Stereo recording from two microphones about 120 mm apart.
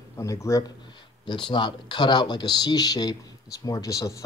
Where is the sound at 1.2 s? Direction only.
40° left (ahead or behind).